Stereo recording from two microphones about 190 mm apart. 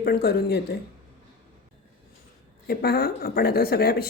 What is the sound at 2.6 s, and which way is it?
A woman's voice, 55° left (ahead or behind).